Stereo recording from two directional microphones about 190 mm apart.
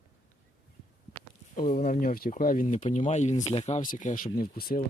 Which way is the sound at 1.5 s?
50° left (ahead or behind).